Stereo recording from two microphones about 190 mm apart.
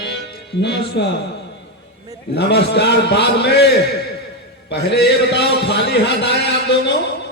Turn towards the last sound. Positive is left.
turn(degrees=65)  # may be behind; listen again after turning